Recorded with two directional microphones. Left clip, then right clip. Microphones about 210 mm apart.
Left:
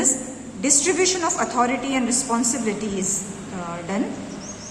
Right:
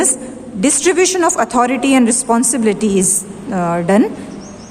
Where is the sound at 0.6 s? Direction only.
55° right (ahead or behind).